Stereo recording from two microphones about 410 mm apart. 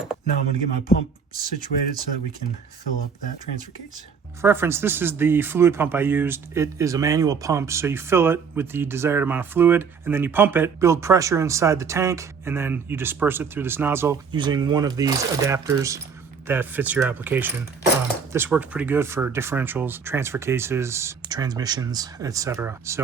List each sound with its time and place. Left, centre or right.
0.3 s music: centre
4.4 s speech: centre